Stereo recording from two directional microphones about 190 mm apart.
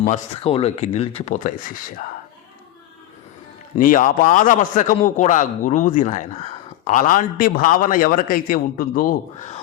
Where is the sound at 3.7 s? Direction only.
45° left (ahead or behind).